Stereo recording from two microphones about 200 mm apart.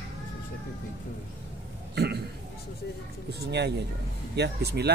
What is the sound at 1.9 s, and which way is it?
Burping, 55° right (ahead or behind).